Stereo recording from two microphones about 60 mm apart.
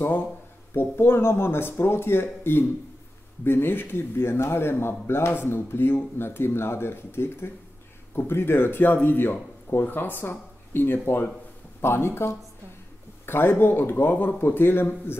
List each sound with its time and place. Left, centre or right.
0.7 s speech: left